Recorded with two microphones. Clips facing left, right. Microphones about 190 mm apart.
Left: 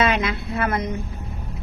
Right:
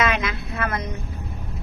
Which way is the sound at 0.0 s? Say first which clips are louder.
Left 2 dB; 30° left (ahead or behind).